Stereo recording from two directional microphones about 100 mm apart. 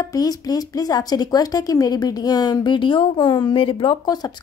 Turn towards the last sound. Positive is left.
turn(degrees=60)  # may be behind; listen again after turning